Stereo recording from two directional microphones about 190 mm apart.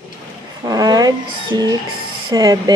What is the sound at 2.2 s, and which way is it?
Speech, 20° right (ahead or behind).